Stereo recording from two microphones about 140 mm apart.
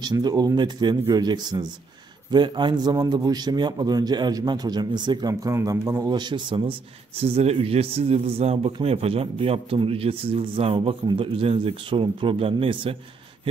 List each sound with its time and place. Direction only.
0.0 s a man's voice: 30° right (ahead or behind)
5.3 s a man's voice: 20° right (ahead or behind); by 12.9 s 40° right (ahead or behind)